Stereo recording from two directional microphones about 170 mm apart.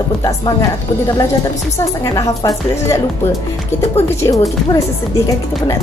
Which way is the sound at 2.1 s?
20° left (ahead or behind).